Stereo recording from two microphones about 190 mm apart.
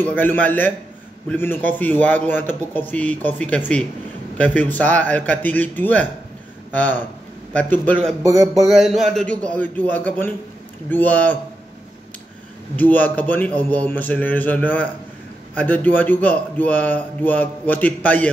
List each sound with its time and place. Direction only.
0.0 s a man's voice: 10° left (ahead or behind)
8.2 s a sound: 15° right (ahead or behind)
8.6 s a man's voice: centre (ahead or behind)
12.7 s a man's voice: 10° left (ahead or behind)